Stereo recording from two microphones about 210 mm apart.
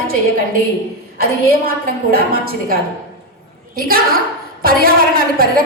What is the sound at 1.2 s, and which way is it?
A woman's voice, 45° right (ahead or behind).